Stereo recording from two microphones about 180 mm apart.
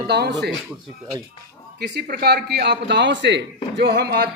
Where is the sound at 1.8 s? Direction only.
65° right (ahead or behind).